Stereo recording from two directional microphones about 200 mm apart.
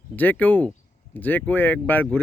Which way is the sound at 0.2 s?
10° left (ahead or behind).